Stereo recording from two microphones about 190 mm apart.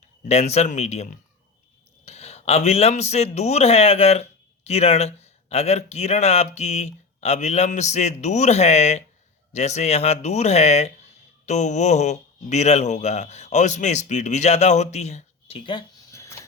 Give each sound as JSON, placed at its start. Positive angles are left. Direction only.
{"t": 0.3, "sound": "speech", "side_deg": 35}